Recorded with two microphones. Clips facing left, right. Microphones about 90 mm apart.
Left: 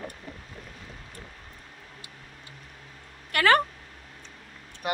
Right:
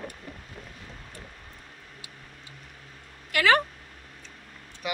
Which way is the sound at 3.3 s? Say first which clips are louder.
Left 1 dB; 45° left (ahead or behind).